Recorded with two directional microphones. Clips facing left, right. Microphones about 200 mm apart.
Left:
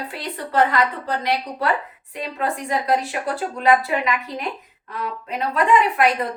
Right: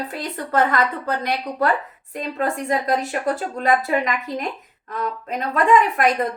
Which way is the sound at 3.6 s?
45° right (ahead or behind).